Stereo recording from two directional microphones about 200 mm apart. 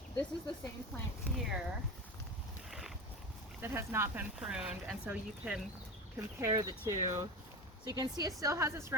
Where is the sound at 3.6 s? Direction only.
10° right (ahead or behind).